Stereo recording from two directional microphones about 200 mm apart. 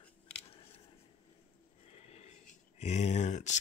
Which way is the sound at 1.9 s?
30° left (ahead or behind).